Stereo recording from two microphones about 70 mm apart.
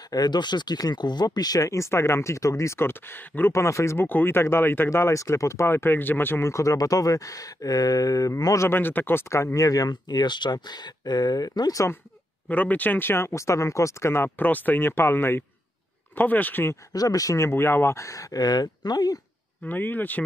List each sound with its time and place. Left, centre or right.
0.1 s speech: left
3.5 s speech: left
8.5 s speech: left
9.3 s speech: left
12.4 s speech: left
16.2 s speech: left
16.9 s speech: left
17.5 s speech: left
19.7 s speech: left